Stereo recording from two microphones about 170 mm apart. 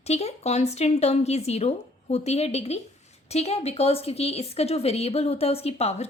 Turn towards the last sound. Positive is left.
turn(degrees=40)  # may be behind; listen again after turning